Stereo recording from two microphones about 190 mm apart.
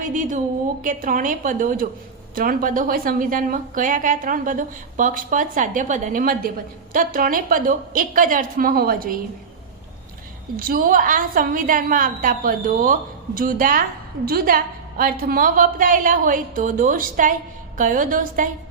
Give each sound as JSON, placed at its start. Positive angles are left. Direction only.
{"t": 0.0, "sound": "a woman's voice", "side_deg": -45}
{"t": 10.6, "sound": "a woman's voice", "side_deg": -50}